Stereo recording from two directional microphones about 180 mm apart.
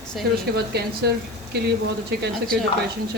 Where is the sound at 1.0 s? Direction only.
65° right (ahead or behind).